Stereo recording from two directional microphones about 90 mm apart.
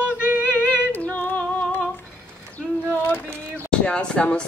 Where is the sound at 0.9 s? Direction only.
20° left (ahead or behind).